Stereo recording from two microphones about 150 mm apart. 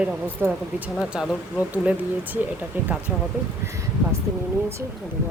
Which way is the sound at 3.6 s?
20° right (ahead or behind).